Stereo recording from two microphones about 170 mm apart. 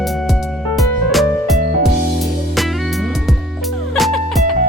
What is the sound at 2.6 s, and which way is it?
Music, centre (ahead or behind).